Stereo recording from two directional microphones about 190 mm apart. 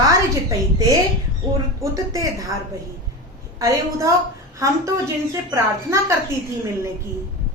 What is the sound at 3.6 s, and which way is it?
A woman's voice, 15° right (ahead or behind).